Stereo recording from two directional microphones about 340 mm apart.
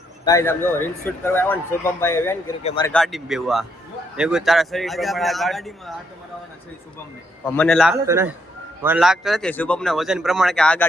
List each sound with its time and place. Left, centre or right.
0.3 s speech: centre
2.9 s speech: centre
7.4 s speech: centre